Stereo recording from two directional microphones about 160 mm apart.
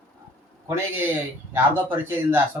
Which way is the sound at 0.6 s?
15° right (ahead or behind).